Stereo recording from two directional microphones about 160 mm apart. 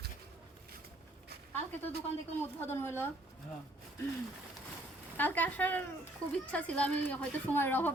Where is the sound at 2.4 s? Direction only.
15° left (ahead or behind).